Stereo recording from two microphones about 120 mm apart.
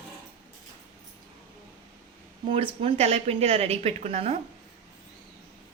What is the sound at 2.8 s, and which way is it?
A woman's voice, 55° right (ahead or behind).